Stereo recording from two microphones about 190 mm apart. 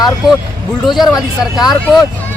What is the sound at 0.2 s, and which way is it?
Speech, centre (ahead or behind).